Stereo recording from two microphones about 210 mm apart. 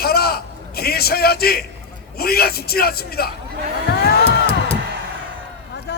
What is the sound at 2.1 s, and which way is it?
A man's voice, 45° left (ahead or behind).